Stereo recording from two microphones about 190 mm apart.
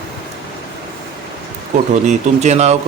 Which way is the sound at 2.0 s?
35° right (ahead or behind).